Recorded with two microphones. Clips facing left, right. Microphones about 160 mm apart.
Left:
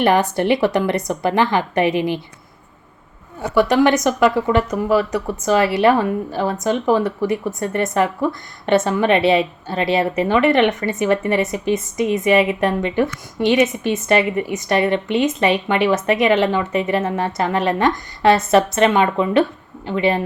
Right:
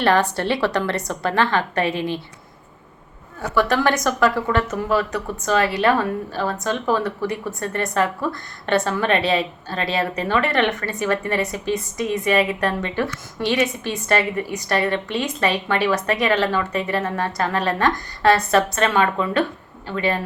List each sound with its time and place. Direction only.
0.0 s a woman's voice: 15° left (ahead or behind)
3.5 s a woman's voice: 15° left (ahead or behind)